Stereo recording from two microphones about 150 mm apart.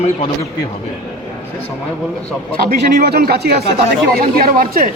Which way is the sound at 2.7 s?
90° right.